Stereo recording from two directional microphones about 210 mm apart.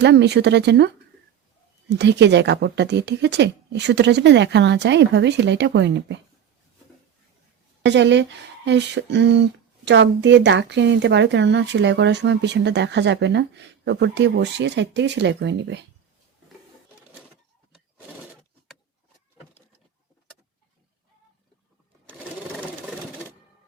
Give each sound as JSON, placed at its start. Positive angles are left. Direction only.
{"t": 0.0, "sound": "speech", "side_deg": -55}
{"t": 1.9, "sound": "speech", "side_deg": -55}
{"t": 7.9, "sound": "speech", "side_deg": -55}